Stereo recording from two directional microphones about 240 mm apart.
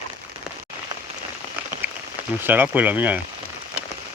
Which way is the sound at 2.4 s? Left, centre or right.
Centre.